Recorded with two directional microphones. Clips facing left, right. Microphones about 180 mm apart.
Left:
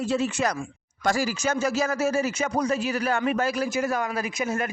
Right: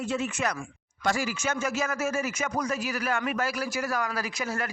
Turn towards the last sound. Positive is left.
turn(degrees=20)  # may be behind; listen again after turning